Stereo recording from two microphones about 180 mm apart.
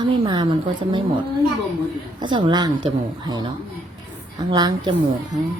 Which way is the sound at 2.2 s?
25° right (ahead or behind).